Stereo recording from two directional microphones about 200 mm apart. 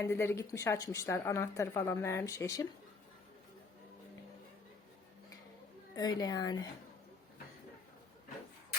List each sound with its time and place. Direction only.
0.0 s a woman's voice: 15° left (ahead or behind)
6.0 s a woman's voice: 20° left (ahead or behind)